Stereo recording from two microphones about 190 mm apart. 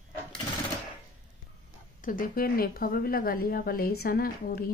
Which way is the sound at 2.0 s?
45° left (ahead or behind).